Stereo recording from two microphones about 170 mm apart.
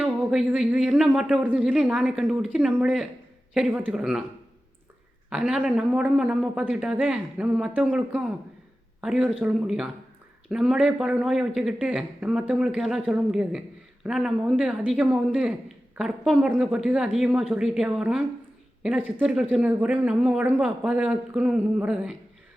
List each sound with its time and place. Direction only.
0.0 s speech: centre (ahead or behind)
5.3 s speech: 5° right (ahead or behind)